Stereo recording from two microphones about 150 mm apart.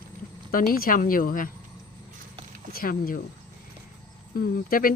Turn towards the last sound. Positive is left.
turn(degrees=70)  # may be behind; listen again after turning